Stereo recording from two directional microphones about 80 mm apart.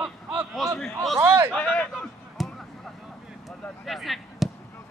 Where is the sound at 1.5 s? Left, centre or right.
Centre.